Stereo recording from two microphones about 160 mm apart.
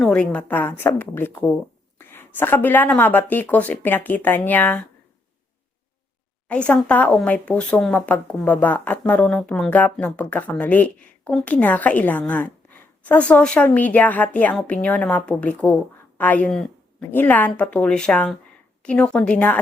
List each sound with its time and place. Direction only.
0.0 s speech: 5° left (ahead or behind)
6.5 s speech: 10° left (ahead or behind)